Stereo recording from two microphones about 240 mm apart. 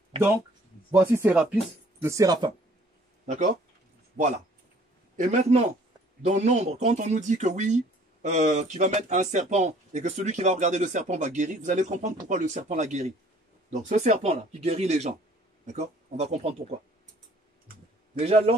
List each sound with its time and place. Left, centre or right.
0.9 s speech: centre
3.3 s speech: right
17.6 s typing: right